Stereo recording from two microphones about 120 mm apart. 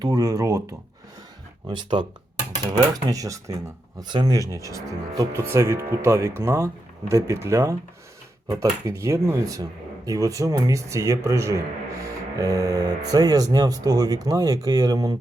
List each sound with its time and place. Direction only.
0.0 s speech: 30° right (ahead or behind)
1.6 s speech: 40° right (ahead or behind)
2.9 s speech: 30° right (ahead or behind)
12.0 s music: 30° right (ahead or behind)
13.1 s speech: 30° right (ahead or behind)